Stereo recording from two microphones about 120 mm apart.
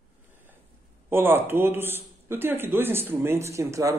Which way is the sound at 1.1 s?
20° right (ahead or behind).